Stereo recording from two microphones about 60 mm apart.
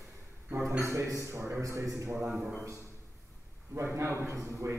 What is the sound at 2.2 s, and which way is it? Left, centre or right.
Speech, centre.